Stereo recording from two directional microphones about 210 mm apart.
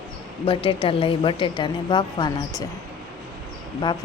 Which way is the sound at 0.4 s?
25° left (ahead or behind).